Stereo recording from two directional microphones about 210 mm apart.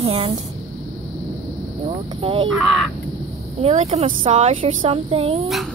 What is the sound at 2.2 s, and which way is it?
Speech, 25° right (ahead or behind).